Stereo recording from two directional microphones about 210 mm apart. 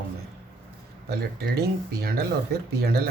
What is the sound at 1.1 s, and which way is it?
Speech, 50° right (ahead or behind).